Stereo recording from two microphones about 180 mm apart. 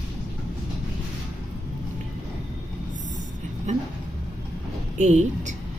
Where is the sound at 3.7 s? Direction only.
40° right (ahead or behind).